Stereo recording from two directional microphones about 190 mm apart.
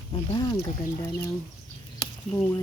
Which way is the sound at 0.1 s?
25° left (ahead or behind).